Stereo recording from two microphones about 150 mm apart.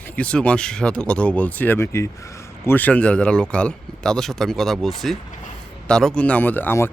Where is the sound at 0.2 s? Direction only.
10° left (ahead or behind).